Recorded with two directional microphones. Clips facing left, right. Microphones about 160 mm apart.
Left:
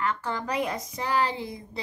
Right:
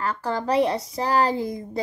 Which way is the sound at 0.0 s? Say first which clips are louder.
Right 3 dB; 35° right (ahead or behind).